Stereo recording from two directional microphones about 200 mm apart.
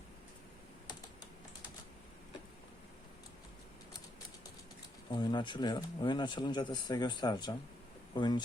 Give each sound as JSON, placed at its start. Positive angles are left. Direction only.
{"t": 5.1, "sound": "speech", "side_deg": 20}